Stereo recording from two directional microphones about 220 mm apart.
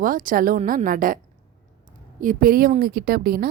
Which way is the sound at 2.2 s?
40° right (ahead or behind).